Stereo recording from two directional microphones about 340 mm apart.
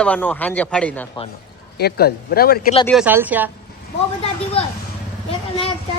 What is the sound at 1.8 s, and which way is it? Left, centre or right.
Speech, left.